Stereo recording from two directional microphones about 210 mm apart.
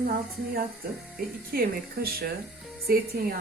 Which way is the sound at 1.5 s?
45° right (ahead or behind).